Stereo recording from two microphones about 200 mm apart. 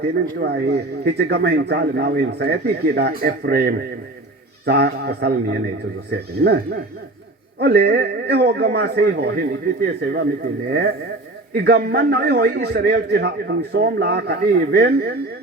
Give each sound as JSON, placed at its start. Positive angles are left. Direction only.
{"t": 0.0, "sound": "a man's voice", "side_deg": -55}